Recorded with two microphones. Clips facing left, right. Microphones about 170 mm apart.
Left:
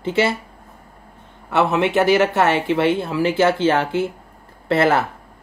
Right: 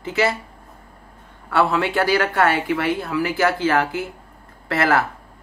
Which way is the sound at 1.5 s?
20° left (ahead or behind).